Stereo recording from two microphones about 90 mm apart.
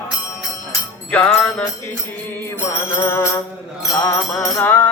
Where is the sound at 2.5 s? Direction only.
25° left (ahead or behind).